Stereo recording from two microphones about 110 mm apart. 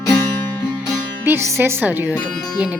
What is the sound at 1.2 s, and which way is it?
Speech, 25° right (ahead or behind).